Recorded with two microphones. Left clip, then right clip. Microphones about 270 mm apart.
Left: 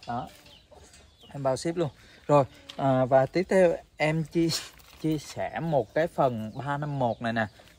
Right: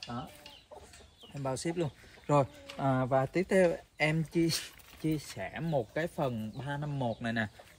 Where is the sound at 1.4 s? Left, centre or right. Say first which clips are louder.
Left 7 dB; centre.